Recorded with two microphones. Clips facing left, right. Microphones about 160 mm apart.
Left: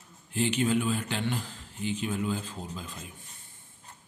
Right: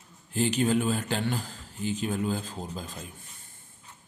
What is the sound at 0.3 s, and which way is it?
Speech, 40° right (ahead or behind).